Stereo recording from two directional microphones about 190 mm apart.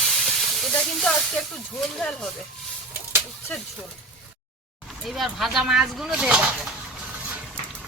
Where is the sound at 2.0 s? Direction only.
5° left (ahead or behind).